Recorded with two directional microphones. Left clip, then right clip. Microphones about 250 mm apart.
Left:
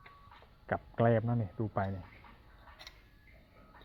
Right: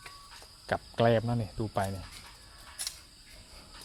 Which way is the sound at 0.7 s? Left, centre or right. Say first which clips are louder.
Right 4 dB; centre.